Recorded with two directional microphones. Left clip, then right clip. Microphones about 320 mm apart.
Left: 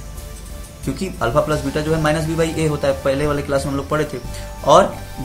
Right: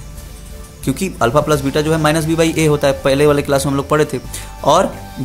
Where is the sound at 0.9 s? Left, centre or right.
Right.